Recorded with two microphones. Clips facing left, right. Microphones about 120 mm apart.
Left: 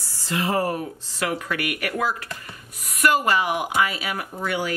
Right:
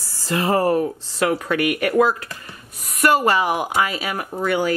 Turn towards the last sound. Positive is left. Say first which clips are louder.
# right 5 dB
turn(degrees=-40)  # may be behind; listen again after turning